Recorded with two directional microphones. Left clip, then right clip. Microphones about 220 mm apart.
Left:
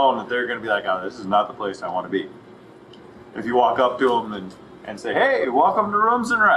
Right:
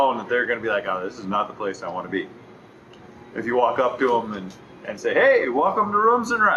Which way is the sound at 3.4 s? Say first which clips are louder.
Left 2 dB; 20° left (ahead or behind).